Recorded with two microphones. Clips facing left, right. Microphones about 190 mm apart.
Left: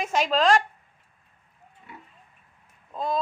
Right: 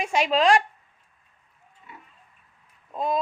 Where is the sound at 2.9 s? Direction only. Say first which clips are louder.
Right 2 dB; 15° right (ahead or behind).